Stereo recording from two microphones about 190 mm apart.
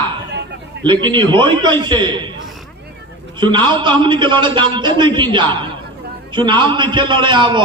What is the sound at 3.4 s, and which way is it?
A man's voice, 25° right (ahead or behind).